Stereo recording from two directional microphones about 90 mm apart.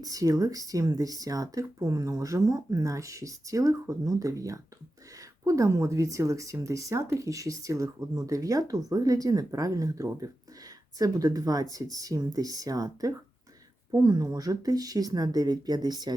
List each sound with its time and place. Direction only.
0.0 s speech: 40° right (ahead or behind)